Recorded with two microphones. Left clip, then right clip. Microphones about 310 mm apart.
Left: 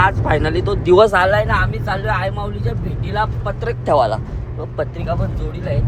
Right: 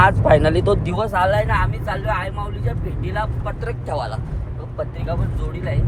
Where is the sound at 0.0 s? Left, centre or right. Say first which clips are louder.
Right 2 dB; centre.